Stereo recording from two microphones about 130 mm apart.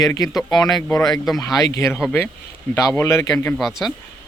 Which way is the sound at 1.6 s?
25° left (ahead or behind).